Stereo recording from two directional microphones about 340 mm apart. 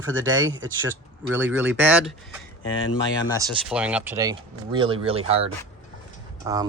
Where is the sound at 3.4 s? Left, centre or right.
Centre.